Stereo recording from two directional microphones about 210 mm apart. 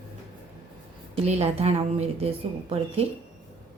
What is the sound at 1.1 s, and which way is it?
A woman's voice, 30° right (ahead or behind).